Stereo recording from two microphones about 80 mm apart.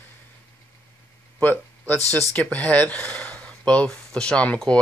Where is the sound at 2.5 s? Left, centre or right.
Centre.